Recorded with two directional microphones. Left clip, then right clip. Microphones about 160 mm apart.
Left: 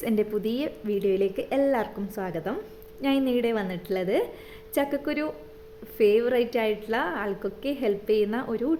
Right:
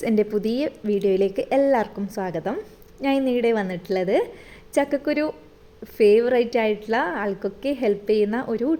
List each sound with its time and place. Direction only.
0.0 s a woman's voice: 25° right (ahead or behind)